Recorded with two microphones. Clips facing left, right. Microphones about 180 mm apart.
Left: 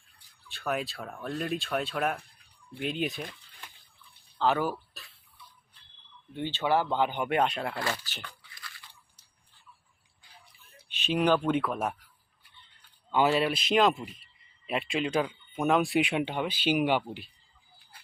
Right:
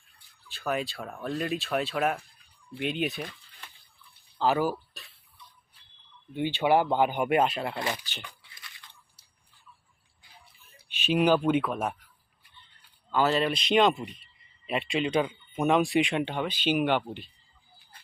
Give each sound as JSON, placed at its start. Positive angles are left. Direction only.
{"t": 0.4, "sound": "speech", "side_deg": 0}
{"t": 4.4, "sound": "speech", "side_deg": -5}
{"t": 6.3, "sound": "speech", "side_deg": -15}
{"t": 7.8, "sound": "speech", "side_deg": -15}
{"t": 8.2, "sound": "a sound", "side_deg": -20}
{"t": 11.0, "sound": "speech", "side_deg": -10}
{"t": 13.1, "sound": "speech", "side_deg": 15}